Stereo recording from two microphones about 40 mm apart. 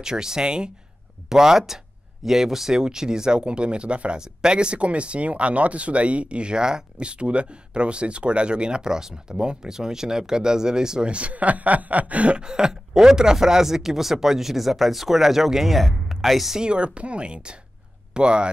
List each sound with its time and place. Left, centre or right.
0.0 s speech: centre
11.1 s speech: right
12.4 s speech: centre
16.5 s speech: right